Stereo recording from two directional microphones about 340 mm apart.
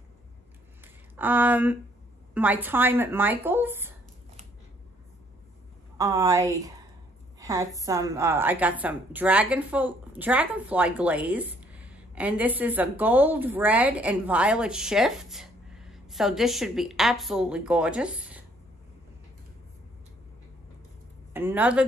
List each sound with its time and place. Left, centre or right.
1.1 s a woman's voice: centre
5.9 s a woman's voice: centre
7.3 s a sound: centre
7.8 s a woman's voice: centre
21.3 s a woman's voice: centre